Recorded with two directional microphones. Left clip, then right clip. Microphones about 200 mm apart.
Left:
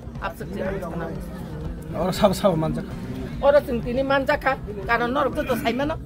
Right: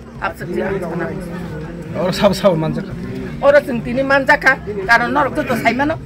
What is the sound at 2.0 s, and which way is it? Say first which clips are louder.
Speech: right 6 dB; 45° left (ahead or behind).